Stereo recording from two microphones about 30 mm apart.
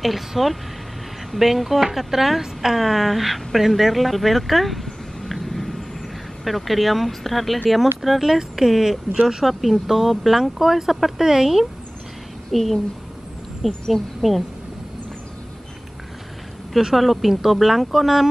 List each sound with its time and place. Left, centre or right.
0.0 s a woman's voice: centre
5.3 s a sound: centre
6.4 s a woman's voice: centre
12.4 s a woman's voice: centre
13.7 s speech: centre
16.7 s a woman's voice: centre